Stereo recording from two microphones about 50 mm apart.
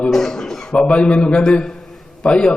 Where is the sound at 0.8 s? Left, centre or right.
Left.